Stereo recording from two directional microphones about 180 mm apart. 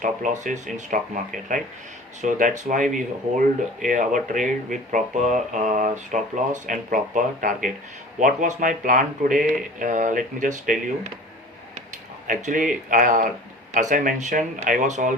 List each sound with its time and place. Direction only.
0.0 s speech: 45° right (ahead or behind)
12.3 s speech: 45° right (ahead or behind)